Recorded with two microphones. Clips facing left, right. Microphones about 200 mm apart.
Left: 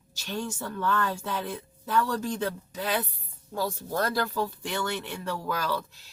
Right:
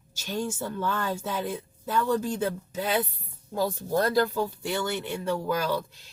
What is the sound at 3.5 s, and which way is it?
Speech, 15° right (ahead or behind).